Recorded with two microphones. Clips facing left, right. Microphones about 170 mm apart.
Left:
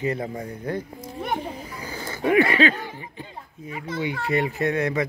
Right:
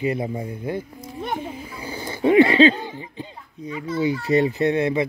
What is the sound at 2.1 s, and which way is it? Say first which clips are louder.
Speech: right 5 dB; 25° right (ahead or behind).